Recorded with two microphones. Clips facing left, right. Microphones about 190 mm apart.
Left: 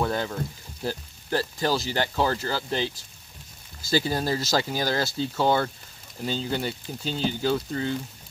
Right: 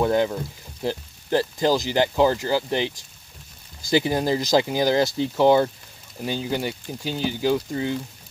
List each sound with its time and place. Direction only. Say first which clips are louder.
0.0 s speech: right 6 dB; 20° right (ahead or behind)